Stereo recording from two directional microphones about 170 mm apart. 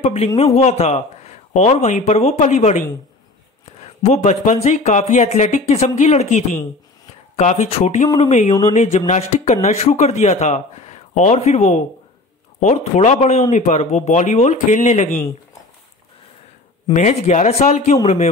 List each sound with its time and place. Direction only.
0.0 s speech: 35° left (ahead or behind)
3.8 s a man's voice: 40° left (ahead or behind)
16.9 s a man's voice: 45° left (ahead or behind)